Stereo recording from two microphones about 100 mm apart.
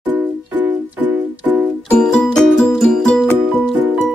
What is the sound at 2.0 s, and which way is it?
Music, 10° left (ahead or behind).